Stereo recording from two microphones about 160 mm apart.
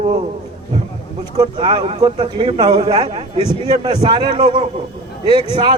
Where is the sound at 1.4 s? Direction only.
30° right (ahead or behind).